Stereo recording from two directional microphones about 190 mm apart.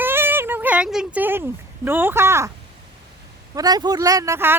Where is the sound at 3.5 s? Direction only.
20° right (ahead or behind).